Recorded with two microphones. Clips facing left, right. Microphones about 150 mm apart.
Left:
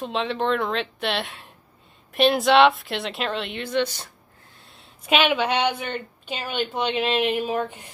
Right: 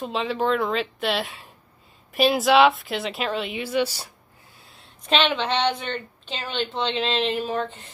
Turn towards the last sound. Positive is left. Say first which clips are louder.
# left 1 dB
turn(degrees=15)  # may be behind; listen again after turning